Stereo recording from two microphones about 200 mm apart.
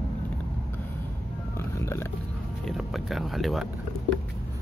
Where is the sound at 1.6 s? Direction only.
15° left (ahead or behind).